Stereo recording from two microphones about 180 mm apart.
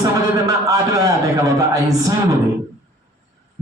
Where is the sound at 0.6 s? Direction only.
20° right (ahead or behind).